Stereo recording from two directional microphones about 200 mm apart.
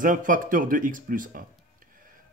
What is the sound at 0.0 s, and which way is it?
Speech, 40° right (ahead or behind).